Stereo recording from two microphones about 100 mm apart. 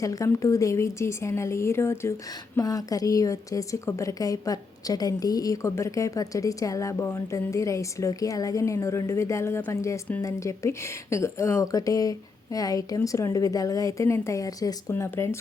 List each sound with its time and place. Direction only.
0.0 s a woman's voice: 35° left (ahead or behind)
2.6 s a woman's voice: 35° left (ahead or behind)
14.9 s speech: 25° left (ahead or behind)